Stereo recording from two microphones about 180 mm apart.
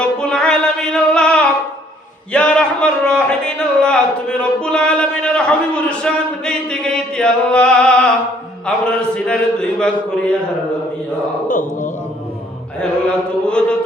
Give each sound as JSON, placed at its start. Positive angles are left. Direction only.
{"t": 0.2, "sound": "music", "side_deg": 5}
{"t": 2.3, "sound": "a sound", "side_deg": 5}
{"t": 11.4, "sound": "mantra", "side_deg": 50}
{"t": 12.8, "sound": "mantra", "side_deg": 5}